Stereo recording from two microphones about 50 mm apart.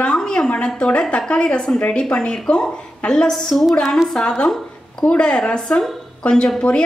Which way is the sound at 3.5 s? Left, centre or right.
Centre.